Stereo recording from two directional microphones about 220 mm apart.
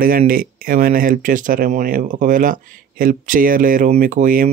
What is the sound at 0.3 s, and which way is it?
Speech, 40° right (ahead or behind).